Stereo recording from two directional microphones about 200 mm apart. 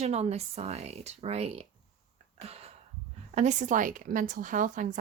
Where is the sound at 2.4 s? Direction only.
30° right (ahead or behind).